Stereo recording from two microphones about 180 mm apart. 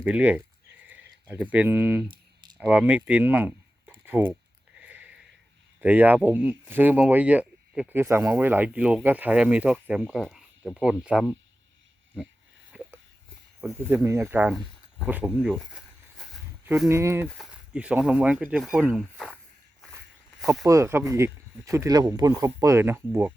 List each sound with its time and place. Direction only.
0.0 s speech: 10° right (ahead or behind)
4.8 s a sound: 10° right (ahead or behind)
5.8 s speech: 10° right (ahead or behind)
12.7 s a sound: 5° right (ahead or behind)
13.9 s speech: 15° right (ahead or behind)
15.4 s a sound: centre (ahead or behind)
16.9 s speech: 15° right (ahead or behind); by 19.4 s centre (ahead or behind)
20.4 s speech: centre (ahead or behind)
20.7 s speech: 15° right (ahead or behind)